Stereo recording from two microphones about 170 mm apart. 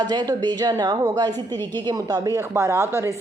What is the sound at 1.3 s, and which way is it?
Speech, 15° left (ahead or behind).